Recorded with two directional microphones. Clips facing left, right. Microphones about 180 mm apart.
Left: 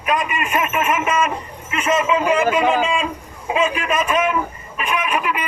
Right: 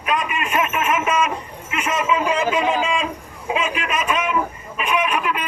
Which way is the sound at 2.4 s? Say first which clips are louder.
Left 3 dB; 55° left (ahead or behind).